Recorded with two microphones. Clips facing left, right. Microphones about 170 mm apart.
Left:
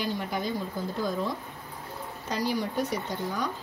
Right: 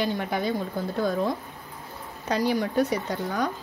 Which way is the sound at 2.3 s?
60° right (ahead or behind).